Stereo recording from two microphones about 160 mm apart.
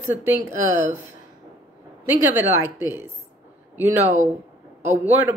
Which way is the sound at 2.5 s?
15° right (ahead or behind).